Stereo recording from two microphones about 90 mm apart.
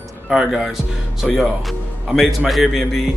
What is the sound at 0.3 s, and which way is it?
A man's voice, 5° right (ahead or behind).